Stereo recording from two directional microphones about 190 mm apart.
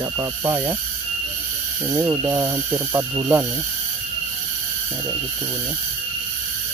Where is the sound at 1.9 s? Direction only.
15° right (ahead or behind).